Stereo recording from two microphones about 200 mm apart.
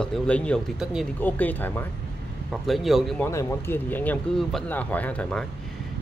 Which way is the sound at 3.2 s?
10° left (ahead or behind).